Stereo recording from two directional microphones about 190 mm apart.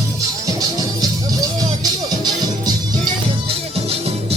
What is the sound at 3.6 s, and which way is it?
Music, 30° right (ahead or behind).